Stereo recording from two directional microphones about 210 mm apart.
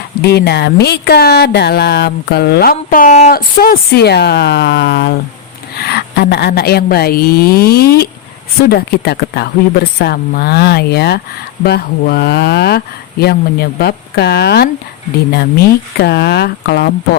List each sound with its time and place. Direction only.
0.2 s speech: 50° left (ahead or behind)
16.0 s speech: 50° left (ahead or behind)